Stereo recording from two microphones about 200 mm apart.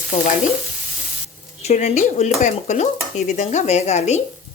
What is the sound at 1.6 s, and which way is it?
Speech, 35° left (ahead or behind).